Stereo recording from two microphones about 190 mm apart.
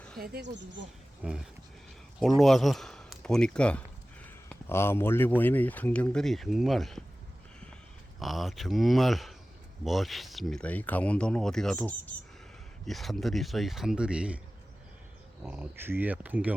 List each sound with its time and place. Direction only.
0.2 s speech: 50° right (ahead or behind)
0.5 s speech: 70° right (ahead or behind)
1.2 s speech: 5° right (ahead or behind)
2.1 s a sound: centre (ahead or behind)
5.4 s speech: 10° left (ahead or behind)
8.2 s speech: centre (ahead or behind)
15.4 s speech: 10° right (ahead or behind)